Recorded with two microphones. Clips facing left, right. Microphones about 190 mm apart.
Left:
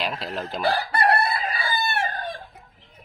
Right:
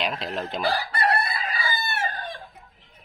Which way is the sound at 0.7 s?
60° left (ahead or behind).